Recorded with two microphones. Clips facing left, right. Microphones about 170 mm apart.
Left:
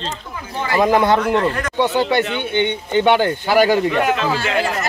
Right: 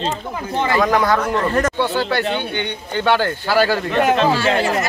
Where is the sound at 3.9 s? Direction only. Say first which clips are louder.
Right 2 dB; 35° right (ahead or behind).